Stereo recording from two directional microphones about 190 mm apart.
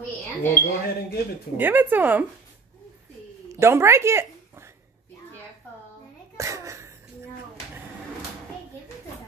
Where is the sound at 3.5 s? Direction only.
15° right (ahead or behind).